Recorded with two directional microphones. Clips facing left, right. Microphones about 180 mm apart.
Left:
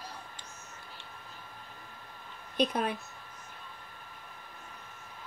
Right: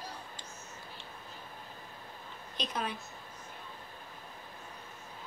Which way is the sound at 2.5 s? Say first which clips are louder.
Left 8 dB; 55° left (ahead or behind).